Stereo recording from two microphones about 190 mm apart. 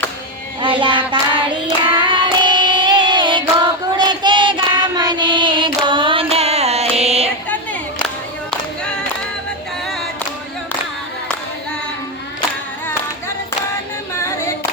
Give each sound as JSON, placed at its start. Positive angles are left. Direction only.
{"t": 0.6, "sound": "child singing", "side_deg": -25}